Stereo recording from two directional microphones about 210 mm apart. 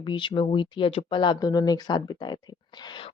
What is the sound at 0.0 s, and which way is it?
Speech, 25° left (ahead or behind).